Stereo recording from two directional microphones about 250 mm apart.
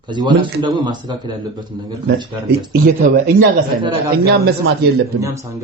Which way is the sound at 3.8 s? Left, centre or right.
Centre.